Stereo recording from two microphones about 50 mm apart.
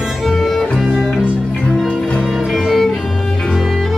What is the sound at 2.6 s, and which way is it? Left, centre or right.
Music, centre.